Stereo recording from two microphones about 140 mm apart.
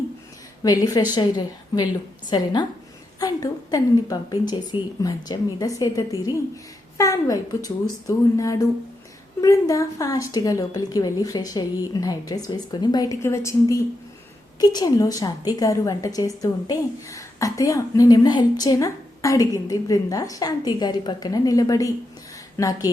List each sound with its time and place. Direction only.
0.6 s a woman's voice: 25° left (ahead or behind)